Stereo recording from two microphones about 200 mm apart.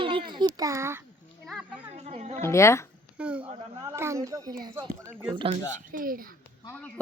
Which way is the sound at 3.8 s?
15° right (ahead or behind).